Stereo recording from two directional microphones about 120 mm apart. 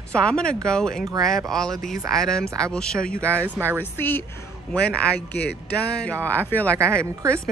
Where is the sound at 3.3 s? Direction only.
15° right (ahead or behind).